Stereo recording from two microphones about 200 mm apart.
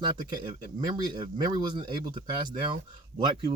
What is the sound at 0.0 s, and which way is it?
Speech, 20° right (ahead or behind).